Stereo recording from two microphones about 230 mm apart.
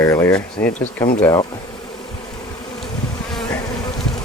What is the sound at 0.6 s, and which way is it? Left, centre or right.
Speech, left.